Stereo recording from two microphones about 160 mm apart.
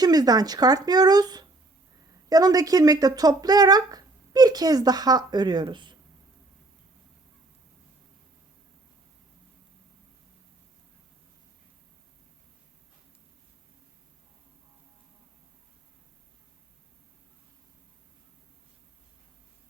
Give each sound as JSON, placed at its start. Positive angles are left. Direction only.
{"t": 0.0, "sound": "speech", "side_deg": -25}